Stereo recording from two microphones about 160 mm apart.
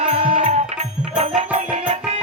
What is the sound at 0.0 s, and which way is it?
Music, 45° right (ahead or behind).